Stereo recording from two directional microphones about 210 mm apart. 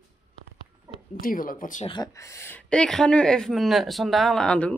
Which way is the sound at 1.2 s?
40° left (ahead or behind).